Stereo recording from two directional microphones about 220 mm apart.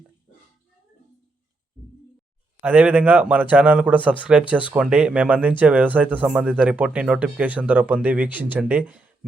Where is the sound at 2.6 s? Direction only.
5° right (ahead or behind).